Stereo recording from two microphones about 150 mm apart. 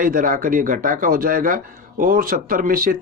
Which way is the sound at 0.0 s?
65° right (ahead or behind).